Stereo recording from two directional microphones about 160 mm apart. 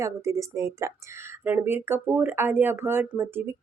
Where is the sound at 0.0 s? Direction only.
20° right (ahead or behind).